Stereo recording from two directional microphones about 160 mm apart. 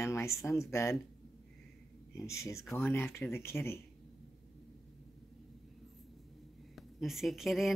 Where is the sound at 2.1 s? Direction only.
20° left (ahead or behind).